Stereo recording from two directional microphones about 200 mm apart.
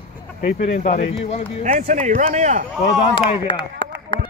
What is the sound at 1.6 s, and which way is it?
Speech, 40° right (ahead or behind).